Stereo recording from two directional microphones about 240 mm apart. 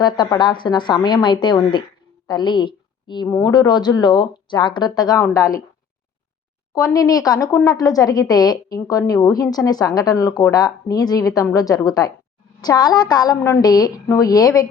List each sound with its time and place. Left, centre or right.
0.0 s a woman's voice: centre
6.7 s speech: centre